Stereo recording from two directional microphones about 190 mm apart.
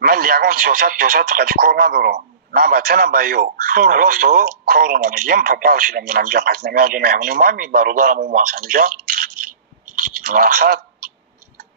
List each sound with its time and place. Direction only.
0.0 s speech: 50° right (ahead or behind)
9.9 s toothbrush: 50° right (ahead or behind)